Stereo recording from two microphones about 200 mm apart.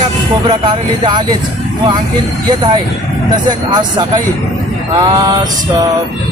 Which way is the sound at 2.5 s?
20° right (ahead or behind).